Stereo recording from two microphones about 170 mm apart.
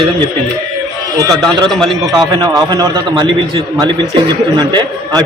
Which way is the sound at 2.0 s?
20° right (ahead or behind).